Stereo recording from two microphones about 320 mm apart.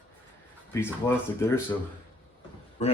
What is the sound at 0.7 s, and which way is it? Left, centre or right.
Speech, centre.